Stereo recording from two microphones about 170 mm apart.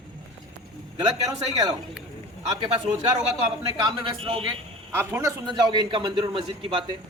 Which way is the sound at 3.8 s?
30° right (ahead or behind).